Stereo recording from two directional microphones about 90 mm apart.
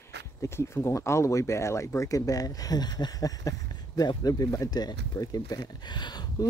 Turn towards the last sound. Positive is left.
turn(degrees=55)  # may be behind; listen again after turning